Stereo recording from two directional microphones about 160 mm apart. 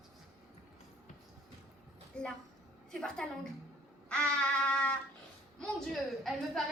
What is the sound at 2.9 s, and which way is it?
Speech, 5° left (ahead or behind).